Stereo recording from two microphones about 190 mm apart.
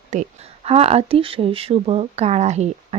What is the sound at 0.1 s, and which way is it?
Speech, 35° right (ahead or behind).